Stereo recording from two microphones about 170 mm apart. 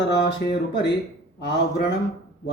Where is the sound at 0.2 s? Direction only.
75° left (ahead or behind).